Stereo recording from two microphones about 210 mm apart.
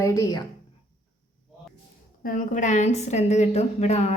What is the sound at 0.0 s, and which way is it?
Speech, 15° left (ahead or behind).